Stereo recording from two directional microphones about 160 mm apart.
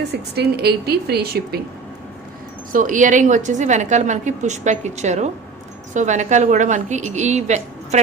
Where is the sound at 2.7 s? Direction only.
55° right (ahead or behind).